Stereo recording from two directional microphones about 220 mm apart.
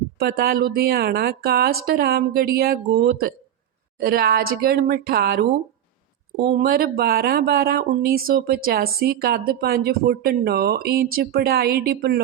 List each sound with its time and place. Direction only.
0.2 s a woman's voice: 45° right (ahead or behind)